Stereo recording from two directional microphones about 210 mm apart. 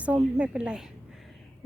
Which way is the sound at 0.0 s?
5° right (ahead or behind).